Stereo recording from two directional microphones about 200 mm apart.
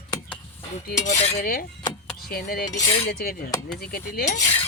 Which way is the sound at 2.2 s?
50° left (ahead or behind).